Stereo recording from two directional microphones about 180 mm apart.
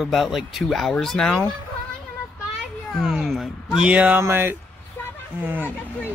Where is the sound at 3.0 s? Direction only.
Centre (ahead or behind).